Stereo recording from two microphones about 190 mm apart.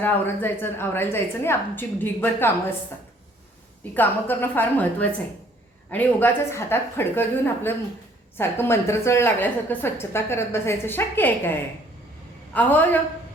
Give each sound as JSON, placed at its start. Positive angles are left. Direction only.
{"t": 0.0, "sound": "a woman's voice", "side_deg": 10}
{"t": 3.9, "sound": "a woman's voice", "side_deg": 10}
{"t": 12.5, "sound": "a woman's voice", "side_deg": 10}